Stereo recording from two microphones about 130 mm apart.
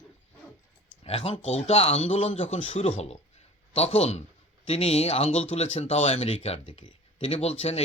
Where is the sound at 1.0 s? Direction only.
50° left (ahead or behind).